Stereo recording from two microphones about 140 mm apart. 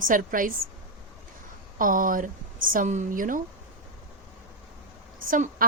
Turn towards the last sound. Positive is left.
turn(degrees=-80)